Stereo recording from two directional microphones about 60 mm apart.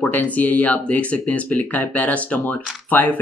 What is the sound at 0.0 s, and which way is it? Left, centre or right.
Speech, left.